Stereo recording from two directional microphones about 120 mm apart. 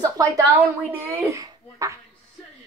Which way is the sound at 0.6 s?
15° right (ahead or behind).